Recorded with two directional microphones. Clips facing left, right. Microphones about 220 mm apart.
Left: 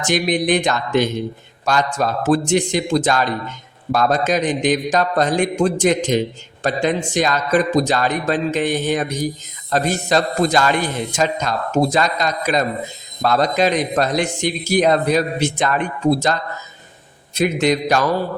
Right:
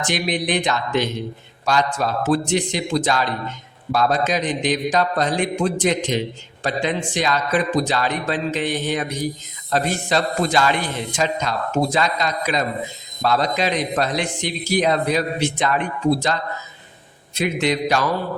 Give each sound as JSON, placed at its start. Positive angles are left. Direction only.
{"t": 0.0, "sound": "a man's voice", "side_deg": 45}